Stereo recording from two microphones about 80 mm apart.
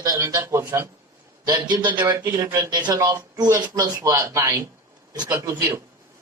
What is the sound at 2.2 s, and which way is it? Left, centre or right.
A man's voice, right.